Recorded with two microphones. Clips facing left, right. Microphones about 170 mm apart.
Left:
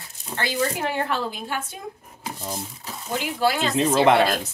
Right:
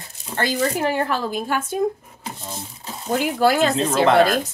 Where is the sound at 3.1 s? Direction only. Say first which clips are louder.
Right 5 dB; 45° right (ahead or behind).